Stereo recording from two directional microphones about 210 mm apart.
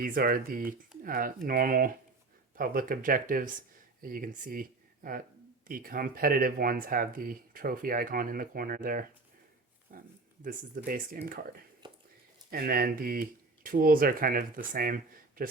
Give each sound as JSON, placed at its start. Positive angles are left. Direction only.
{"t": 0.0, "sound": "speech", "side_deg": -45}
{"t": 5.6, "sound": "speech", "side_deg": -40}
{"t": 11.8, "sound": "a sound", "side_deg": -20}
{"t": 12.5, "sound": "speech", "side_deg": -45}